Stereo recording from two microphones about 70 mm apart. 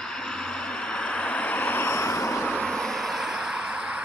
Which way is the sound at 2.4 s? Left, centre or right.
Centre.